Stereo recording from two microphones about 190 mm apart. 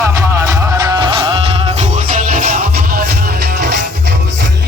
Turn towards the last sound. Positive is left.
turn(degrees=-50)  # may be behind; listen again after turning